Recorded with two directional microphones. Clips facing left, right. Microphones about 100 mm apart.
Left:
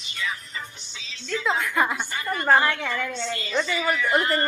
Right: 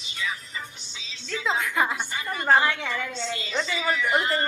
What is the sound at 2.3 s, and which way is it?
A woman's voice, 20° right (ahead or behind).